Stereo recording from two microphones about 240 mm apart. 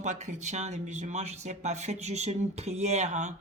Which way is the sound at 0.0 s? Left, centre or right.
Right.